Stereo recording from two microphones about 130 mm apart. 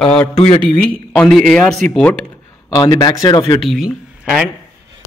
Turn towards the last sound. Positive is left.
turn(degrees=-5)  # may be behind; listen again after turning